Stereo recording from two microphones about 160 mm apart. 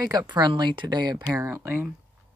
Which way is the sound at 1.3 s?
15° right (ahead or behind).